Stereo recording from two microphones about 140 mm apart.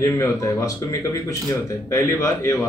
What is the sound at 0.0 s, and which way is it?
Speech, 20° left (ahead or behind).